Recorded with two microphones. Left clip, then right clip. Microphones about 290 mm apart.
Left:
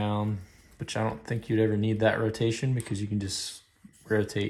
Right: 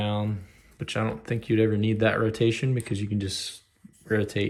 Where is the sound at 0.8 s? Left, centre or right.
Centre.